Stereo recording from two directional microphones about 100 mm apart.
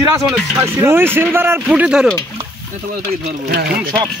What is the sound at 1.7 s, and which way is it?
Speech, 5° right (ahead or behind).